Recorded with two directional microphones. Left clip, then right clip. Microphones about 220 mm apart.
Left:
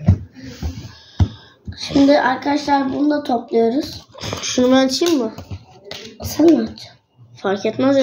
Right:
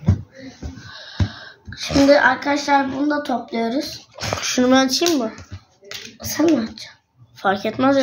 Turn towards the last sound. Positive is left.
turn(degrees=-20)  # may be behind; listen again after turning